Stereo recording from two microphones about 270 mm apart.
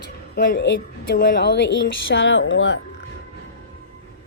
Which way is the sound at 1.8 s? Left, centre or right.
Left.